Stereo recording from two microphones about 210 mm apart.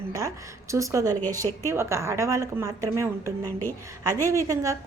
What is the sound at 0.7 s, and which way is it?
A woman's voice, 15° right (ahead or behind).